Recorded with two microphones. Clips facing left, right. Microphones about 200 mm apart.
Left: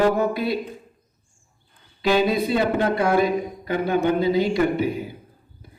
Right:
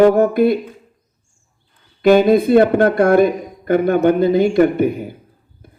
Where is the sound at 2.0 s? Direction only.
50° right (ahead or behind).